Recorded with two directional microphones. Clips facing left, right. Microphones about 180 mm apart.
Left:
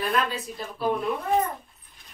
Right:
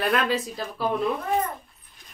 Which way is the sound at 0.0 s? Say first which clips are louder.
Right 3 dB; 80° right.